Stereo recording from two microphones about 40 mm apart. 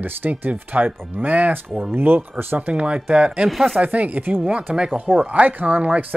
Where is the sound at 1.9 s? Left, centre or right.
Right.